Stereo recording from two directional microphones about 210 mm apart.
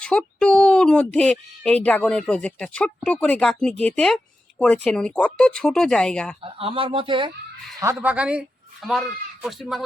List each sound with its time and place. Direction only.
0.0 s speech: 5° left (ahead or behind)
6.4 s speech: 25° right (ahead or behind)
7.9 s speech: 5° right (ahead or behind)